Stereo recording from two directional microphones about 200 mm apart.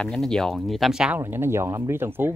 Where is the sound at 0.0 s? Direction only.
5° left (ahead or behind).